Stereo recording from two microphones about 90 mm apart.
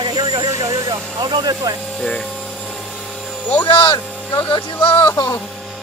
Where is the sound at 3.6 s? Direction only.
75° left (ahead or behind).